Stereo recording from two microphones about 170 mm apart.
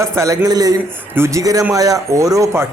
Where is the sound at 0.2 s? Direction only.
20° right (ahead or behind).